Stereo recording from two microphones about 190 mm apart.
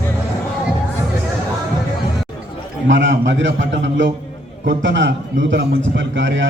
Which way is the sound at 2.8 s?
70° right (ahead or behind).